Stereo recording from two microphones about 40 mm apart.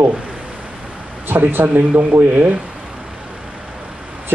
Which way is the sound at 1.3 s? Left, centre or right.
Right.